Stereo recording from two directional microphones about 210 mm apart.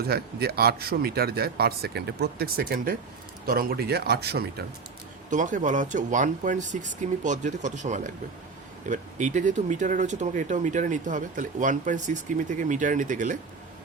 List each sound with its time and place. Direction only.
0.0 s speech: 50° right (ahead or behind)
5.3 s speech: 35° right (ahead or behind)